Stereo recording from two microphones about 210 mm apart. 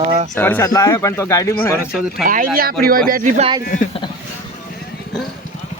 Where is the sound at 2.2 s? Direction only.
40° right (ahead or behind).